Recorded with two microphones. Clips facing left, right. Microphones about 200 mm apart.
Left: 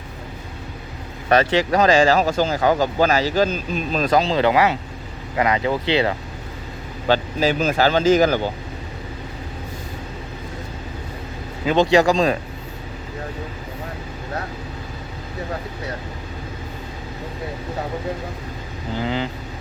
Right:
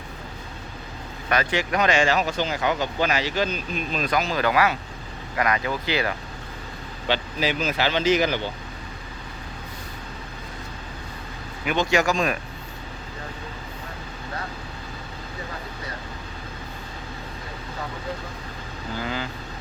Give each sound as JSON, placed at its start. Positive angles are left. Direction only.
{"t": 1.3, "sound": "speech", "side_deg": 35}
{"t": 7.1, "sound": "speech", "side_deg": 45}
{"t": 11.6, "sound": "speech", "side_deg": 30}
{"t": 18.9, "sound": "speech", "side_deg": 20}